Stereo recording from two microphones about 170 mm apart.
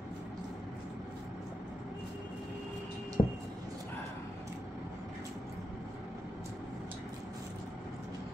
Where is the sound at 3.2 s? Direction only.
35° left (ahead or behind).